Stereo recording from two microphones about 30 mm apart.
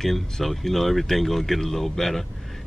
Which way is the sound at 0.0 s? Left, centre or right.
Centre.